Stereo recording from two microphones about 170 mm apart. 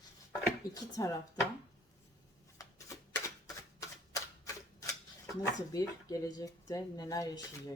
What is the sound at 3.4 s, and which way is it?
Typewriter, 20° left (ahead or behind).